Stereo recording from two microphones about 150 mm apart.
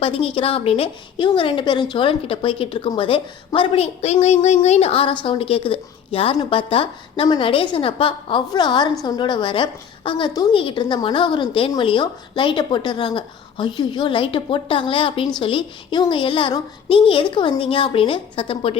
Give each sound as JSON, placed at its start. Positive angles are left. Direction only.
{"t": 0.0, "sound": "a woman's voice", "side_deg": 40}
{"t": 4.0, "sound": "a woman's voice", "side_deg": 50}